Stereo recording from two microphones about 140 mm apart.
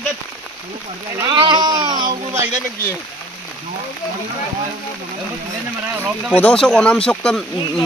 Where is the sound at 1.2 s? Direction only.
35° right (ahead or behind).